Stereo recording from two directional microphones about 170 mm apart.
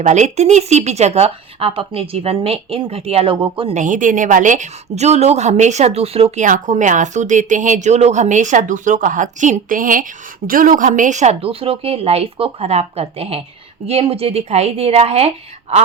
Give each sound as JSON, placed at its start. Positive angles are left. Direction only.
{"t": 0.0, "sound": "speech", "side_deg": -45}
{"t": 3.8, "sound": "a woman's voice", "side_deg": -50}